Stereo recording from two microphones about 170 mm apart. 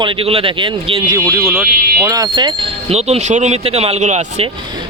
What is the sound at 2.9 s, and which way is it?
Speech, 40° right (ahead or behind).